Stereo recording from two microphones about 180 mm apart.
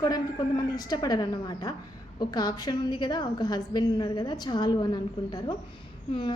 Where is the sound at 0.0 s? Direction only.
20° left (ahead or behind).